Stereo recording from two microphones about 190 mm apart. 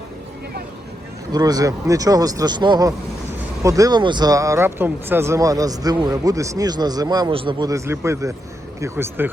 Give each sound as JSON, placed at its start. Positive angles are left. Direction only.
{"t": 1.3, "sound": "speech", "side_deg": -20}